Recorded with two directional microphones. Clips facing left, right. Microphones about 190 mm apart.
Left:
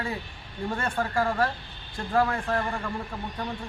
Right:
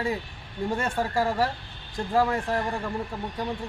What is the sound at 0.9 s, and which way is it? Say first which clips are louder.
Speech: even; 10° right (ahead or behind).